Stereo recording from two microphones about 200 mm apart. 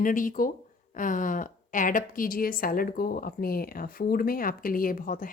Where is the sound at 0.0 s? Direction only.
40° left (ahead or behind).